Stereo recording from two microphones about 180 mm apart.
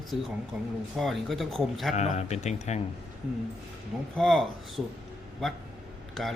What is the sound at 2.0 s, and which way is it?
Speech, 40° left (ahead or behind).